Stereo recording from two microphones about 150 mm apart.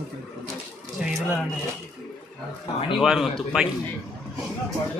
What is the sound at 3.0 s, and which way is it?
Speech, 5° right (ahead or behind).